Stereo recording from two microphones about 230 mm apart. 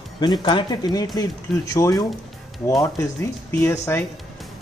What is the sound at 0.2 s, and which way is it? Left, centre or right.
Speech, centre.